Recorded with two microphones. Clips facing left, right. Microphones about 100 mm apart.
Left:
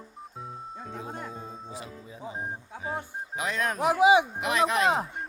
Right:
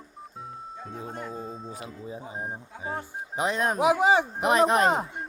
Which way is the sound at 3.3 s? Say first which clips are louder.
Right 4 dB; 35° right (ahead or behind).